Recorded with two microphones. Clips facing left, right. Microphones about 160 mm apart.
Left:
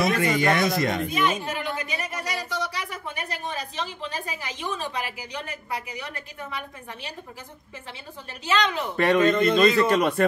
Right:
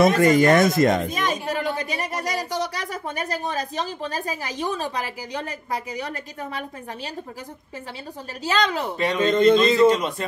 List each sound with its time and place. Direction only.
0.0 s a woman's voice: 45° right (ahead or behind)
8.5 s a woman's voice: 35° right (ahead or behind)
8.9 s speech: 55° left (ahead or behind)
9.3 s a man's voice: 25° right (ahead or behind)
9.8 s speech: 60° left (ahead or behind)